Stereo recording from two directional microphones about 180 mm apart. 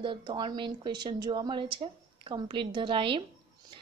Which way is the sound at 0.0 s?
30° right (ahead or behind).